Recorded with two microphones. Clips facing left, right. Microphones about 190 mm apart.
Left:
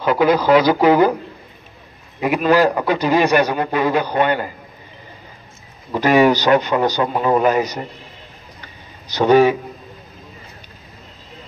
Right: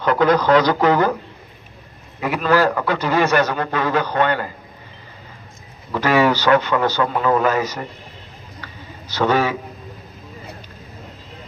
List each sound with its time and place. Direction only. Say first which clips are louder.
0.0 s a man's voice: left 1 dB; 10° left (ahead or behind)
2.1 s a man's voice: left 3 dB; 15° left (ahead or behind)
5.9 s a man's voice: left 3 dB; 15° left (ahead or behind)
9.1 s a man's voice: left 6 dB; 15° left (ahead or behind)